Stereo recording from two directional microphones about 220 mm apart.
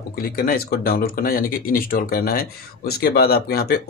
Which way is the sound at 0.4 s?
40° left (ahead or behind).